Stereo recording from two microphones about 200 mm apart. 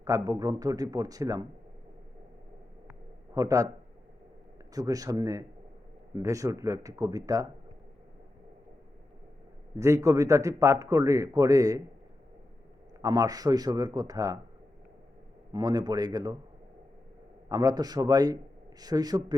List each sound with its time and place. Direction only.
0.0 s a man's voice: 15° right (ahead or behind)
3.3 s a man's voice: 15° right (ahead or behind)
4.7 s a man's voice: 15° right (ahead or behind)
9.7 s a man's voice: 15° right (ahead or behind)
13.0 s a man's voice: 15° right (ahead or behind)
15.5 s a man's voice: 20° right (ahead or behind)
17.5 s a man's voice: 15° right (ahead or behind)